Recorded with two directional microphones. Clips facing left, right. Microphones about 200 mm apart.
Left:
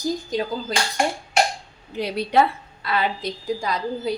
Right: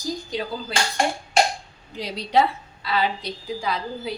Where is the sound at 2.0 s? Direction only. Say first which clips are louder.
Left 2 dB; 55° left (ahead or behind).